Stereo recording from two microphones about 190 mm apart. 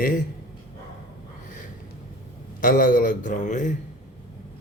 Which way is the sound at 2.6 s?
45° left (ahead or behind).